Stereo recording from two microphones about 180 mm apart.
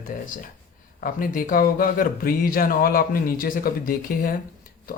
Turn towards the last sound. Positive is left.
turn(degrees=50)  # may be behind; listen again after turning